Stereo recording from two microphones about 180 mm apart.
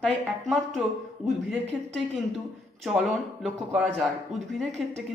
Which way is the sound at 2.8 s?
Centre (ahead or behind).